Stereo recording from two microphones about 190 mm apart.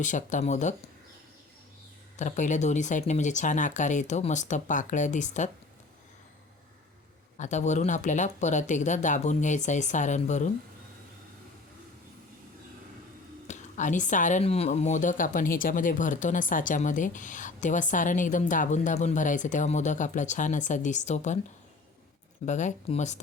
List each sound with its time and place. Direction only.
0.0 s speech: 40° left (ahead or behind)
2.1 s speech: 40° left (ahead or behind)
7.3 s speech: 40° left (ahead or behind)
13.5 s speech: 40° left (ahead or behind)
22.4 s speech: 40° left (ahead or behind)